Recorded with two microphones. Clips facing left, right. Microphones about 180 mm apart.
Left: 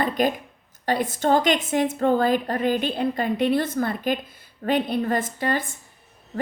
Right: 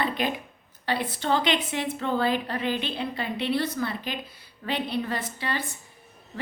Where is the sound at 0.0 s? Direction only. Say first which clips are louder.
Left 5 dB; 45° left (ahead or behind).